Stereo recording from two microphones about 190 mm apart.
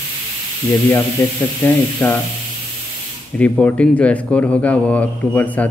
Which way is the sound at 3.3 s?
5° left (ahead or behind).